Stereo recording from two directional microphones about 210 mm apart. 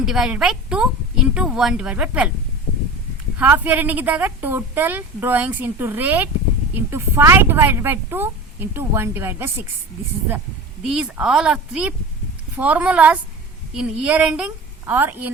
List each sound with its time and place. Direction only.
0.0 s a woman's voice: centre (ahead or behind)
3.3 s a woman's voice: 10° right (ahead or behind)
10.8 s a woman's voice: 5° right (ahead or behind)